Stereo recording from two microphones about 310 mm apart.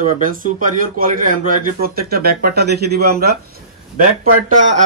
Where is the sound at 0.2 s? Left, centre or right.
Right.